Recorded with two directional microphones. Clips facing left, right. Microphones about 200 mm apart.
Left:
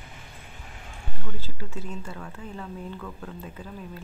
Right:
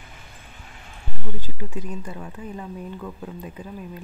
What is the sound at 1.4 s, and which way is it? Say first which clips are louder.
Speech: right 4 dB; 15° right (ahead or behind).